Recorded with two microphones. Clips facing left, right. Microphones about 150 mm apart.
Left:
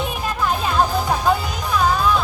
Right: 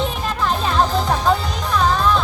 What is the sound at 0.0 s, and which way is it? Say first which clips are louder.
Music: right 1 dB; 10° left (ahead or behind).